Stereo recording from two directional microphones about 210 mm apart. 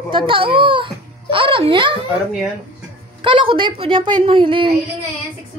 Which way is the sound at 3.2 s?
25° right (ahead or behind).